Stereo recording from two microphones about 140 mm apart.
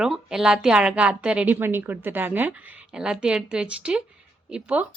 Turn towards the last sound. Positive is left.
turn(degrees=-10)  # may be behind; listen again after turning